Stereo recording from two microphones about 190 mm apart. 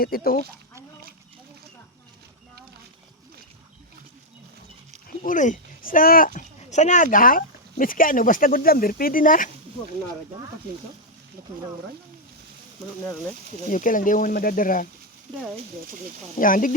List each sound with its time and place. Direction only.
0.0 s speech: 50° left (ahead or behind)
5.2 s speech: 40° left (ahead or behind)
13.7 s speech: 45° left (ahead or behind)
16.4 s speech: 45° left (ahead or behind)